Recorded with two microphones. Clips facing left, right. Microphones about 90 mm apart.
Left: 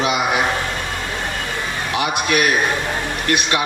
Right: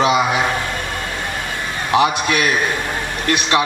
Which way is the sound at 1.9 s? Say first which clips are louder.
Right 5 dB; 25° right (ahead or behind).